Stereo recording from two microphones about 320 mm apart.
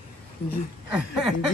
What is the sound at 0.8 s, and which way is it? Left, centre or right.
Speech, centre.